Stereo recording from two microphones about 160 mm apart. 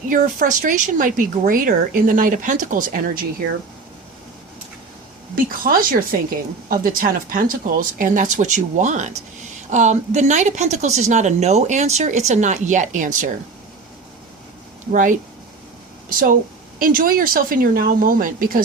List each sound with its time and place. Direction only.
0.1 s speech: 55° right (ahead or behind)
5.3 s a woman's voice: 60° right (ahead or behind)
16.0 s speech: 60° right (ahead or behind)